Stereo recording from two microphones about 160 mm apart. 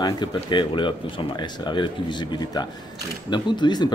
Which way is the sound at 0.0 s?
30° left (ahead or behind).